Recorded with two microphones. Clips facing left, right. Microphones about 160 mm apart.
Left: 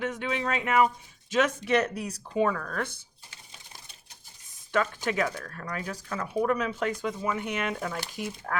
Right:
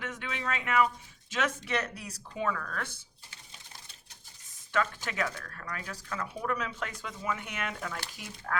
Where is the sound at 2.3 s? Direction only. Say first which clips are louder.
Left 7 dB; 40° left (ahead or behind).